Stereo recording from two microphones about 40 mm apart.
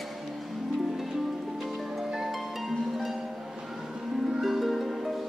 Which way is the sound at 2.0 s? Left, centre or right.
Centre.